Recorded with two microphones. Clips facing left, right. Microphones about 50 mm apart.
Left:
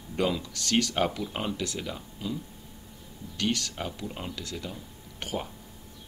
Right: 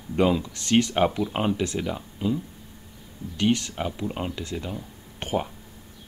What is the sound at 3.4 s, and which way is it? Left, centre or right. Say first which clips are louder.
Speech: right 6 dB; right.